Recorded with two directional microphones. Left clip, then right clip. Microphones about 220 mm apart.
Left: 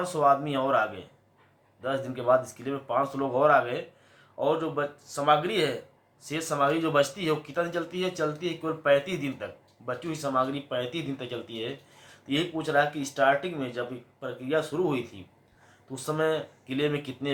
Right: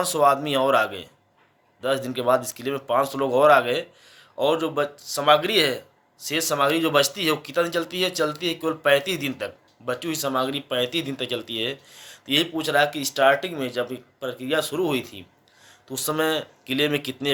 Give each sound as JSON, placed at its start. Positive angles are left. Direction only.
{"t": 0.0, "sound": "speech", "side_deg": -45}